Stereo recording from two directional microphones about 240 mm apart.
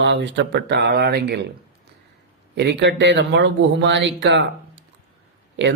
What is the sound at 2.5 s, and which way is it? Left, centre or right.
A man's voice, right.